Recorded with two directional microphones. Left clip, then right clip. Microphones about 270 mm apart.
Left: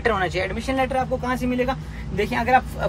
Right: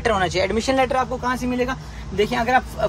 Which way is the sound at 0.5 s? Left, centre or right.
Right.